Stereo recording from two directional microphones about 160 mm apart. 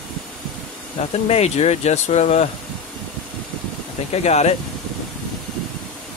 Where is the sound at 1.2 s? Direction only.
40° left (ahead or behind).